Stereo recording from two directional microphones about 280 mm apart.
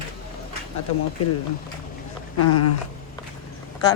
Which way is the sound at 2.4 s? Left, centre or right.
Left.